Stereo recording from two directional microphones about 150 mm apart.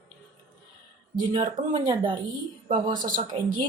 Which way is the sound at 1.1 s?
30° right (ahead or behind).